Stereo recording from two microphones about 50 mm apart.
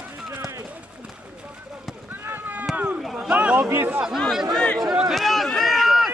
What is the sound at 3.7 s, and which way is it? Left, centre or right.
Speech, right.